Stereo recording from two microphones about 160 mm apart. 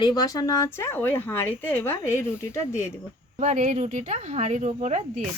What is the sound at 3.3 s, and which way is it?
Speech, 50° right (ahead or behind).